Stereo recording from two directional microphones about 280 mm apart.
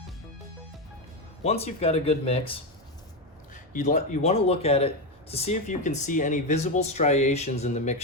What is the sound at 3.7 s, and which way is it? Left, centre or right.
Speech, left.